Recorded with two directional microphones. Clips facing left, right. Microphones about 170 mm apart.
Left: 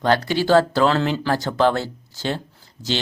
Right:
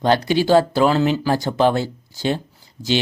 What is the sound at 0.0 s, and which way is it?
Speech, 15° right (ahead or behind).